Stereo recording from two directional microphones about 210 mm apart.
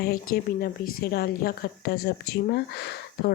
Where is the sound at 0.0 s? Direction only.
45° left (ahead or behind).